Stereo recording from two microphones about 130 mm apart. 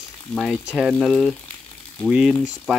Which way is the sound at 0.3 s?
Centre (ahead or behind).